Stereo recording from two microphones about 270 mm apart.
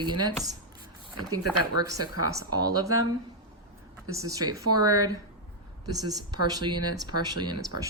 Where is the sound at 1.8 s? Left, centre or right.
Centre.